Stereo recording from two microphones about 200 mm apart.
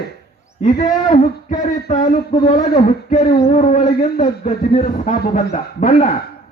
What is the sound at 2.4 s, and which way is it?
A man's voice, 30° left (ahead or behind).